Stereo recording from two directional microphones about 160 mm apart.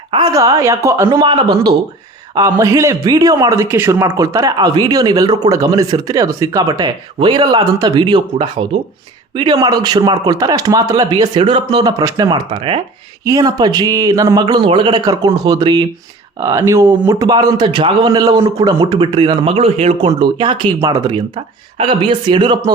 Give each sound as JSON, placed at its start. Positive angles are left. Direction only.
{"t": 0.3, "sound": "a man's voice", "side_deg": -20}
{"t": 13.2, "sound": "a man's voice", "side_deg": -20}
{"t": 20.1, "sound": "a man's voice", "side_deg": -30}